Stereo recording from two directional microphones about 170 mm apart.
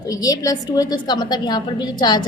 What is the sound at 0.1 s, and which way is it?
A woman's voice, 20° left (ahead or behind).